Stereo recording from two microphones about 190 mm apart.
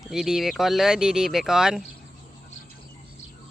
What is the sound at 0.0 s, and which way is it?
Speech, centre (ahead or behind).